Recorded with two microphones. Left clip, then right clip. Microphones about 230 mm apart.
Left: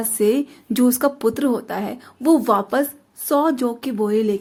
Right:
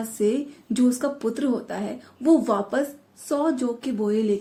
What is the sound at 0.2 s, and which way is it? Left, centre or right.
A woman's voice, left.